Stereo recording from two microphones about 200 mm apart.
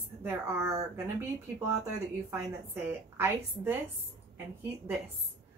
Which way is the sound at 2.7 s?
10° right (ahead or behind).